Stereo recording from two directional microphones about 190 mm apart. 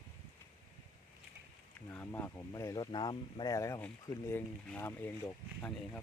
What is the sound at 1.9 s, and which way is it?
Speech, 10° left (ahead or behind).